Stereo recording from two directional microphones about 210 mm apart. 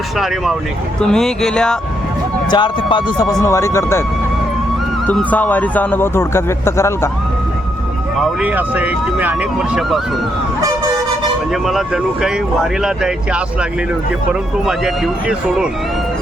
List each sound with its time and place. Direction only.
1.0 s speech: 5° left (ahead or behind)
2.5 s speech: 20° left (ahead or behind)
5.0 s speech: 10° left (ahead or behind)
8.2 s speech: 5° right (ahead or behind)
12.8 s speech: 5° right (ahead or behind)
14.7 s speech: centre (ahead or behind)